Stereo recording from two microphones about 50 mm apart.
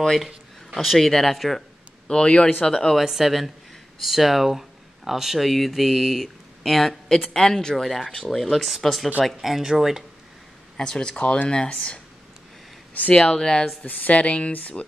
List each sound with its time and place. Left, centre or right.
0.0 s speech: centre
2.0 s speech: centre
3.0 s speech: centre
7.3 s speech: centre
7.7 s speech: centre
10.8 s speech: centre
13.1 s speech: centre
13.8 s speech: left